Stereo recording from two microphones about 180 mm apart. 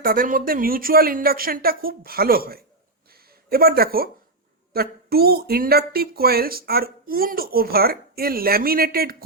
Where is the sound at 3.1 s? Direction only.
55° right (ahead or behind).